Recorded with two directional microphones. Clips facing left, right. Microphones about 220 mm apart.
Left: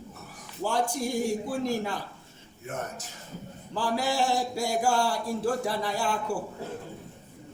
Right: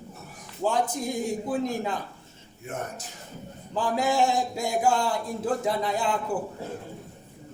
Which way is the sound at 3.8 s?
20° right (ahead or behind).